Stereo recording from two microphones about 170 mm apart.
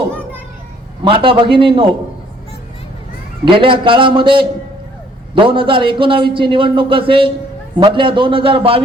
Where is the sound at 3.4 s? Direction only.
30° right (ahead or behind).